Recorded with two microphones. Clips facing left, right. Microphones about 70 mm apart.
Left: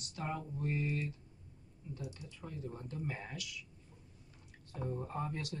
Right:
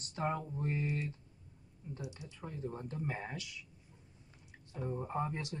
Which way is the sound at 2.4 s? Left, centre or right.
Right.